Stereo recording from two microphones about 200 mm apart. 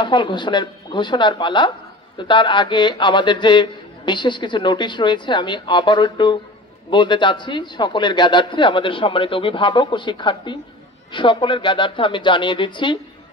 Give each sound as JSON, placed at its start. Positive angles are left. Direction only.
{"t": 0.0, "sound": "a man's voice", "side_deg": 25}